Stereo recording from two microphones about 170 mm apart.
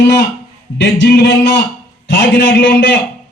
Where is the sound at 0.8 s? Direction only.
90° left.